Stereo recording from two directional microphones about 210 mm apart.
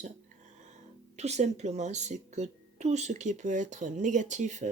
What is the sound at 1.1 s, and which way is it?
Speech, 30° right (ahead or behind).